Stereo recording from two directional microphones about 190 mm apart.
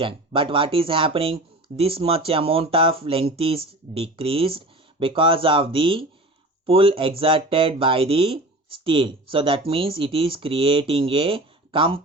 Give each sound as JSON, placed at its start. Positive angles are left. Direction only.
{"t": 0.0, "sound": "speech", "side_deg": -25}